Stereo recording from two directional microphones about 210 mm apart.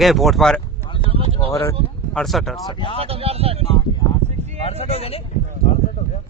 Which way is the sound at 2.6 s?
20° left (ahead or behind).